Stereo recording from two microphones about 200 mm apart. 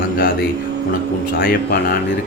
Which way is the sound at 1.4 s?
50° left (ahead or behind).